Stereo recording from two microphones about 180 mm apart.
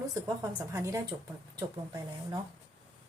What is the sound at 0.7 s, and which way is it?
Speech, 15° right (ahead or behind).